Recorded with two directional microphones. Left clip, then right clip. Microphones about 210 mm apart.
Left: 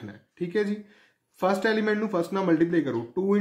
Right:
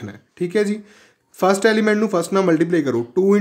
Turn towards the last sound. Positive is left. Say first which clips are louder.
# right 9 dB
turn(degrees=-45)  # may be behind; listen again after turning